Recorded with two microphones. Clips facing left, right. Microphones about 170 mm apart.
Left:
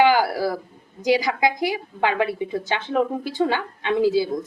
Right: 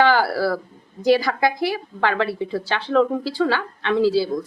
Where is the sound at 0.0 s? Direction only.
15° left (ahead or behind).